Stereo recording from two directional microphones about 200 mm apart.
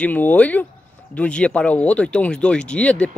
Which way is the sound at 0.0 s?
10° left (ahead or behind).